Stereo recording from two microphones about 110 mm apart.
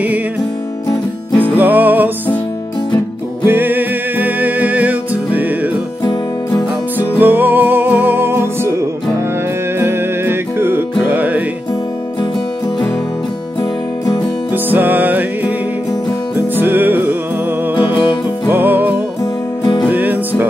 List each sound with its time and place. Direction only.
1.6 s music: 15° right (ahead or behind)
3.4 s music: 20° right (ahead or behind)
7.0 s music: 15° right (ahead or behind)
13.6 s music: 40° left (ahead or behind)
14.5 s music: 15° right (ahead or behind)
18.5 s music: 15° right (ahead or behind)
19.6 s music: 45° left (ahead or behind)
19.9 s music: 15° right (ahead or behind)